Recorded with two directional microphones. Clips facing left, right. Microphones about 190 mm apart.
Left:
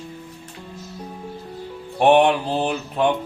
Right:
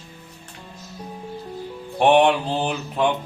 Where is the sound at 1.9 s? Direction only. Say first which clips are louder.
Left 1 dB; 5° left (ahead or behind).